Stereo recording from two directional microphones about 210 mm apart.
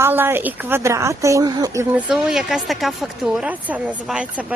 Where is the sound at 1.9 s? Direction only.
Centre (ahead or behind).